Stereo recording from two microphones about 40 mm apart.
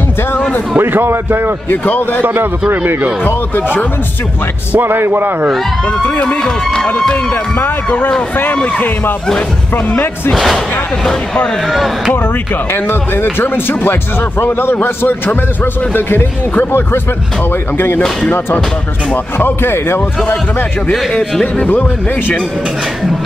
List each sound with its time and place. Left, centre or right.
0.7 s a man's voice: right
1.7 s a man's voice: left
3.3 s a man's voice: left
4.7 s a man's voice: right
5.9 s speech: left
6.4 s speech: centre
9.8 s a man's voice: left
10.3 s speech: centre
12.7 s a man's voice: left
19.3 s speech: left